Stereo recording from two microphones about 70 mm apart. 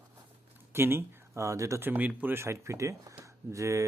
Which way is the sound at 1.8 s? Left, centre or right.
Right.